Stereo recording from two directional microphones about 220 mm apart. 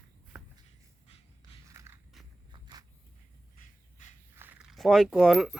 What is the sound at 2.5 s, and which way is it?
Walk, 20° right (ahead or behind).